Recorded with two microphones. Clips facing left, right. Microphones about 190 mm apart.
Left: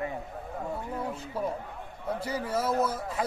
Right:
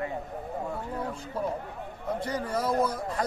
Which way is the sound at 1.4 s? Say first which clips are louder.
Right 2 dB; 5° left (ahead or behind).